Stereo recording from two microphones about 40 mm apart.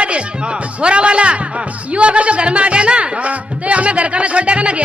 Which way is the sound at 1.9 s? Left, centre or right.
Right.